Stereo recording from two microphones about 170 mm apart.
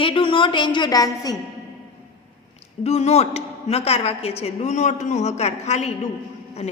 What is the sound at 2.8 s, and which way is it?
A woman's voice, 40° left (ahead or behind).